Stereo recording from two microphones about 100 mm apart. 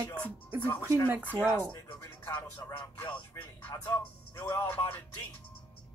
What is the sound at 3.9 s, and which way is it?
Speech, 30° left (ahead or behind).